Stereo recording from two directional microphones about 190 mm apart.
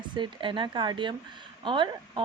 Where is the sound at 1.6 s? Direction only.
25° right (ahead or behind).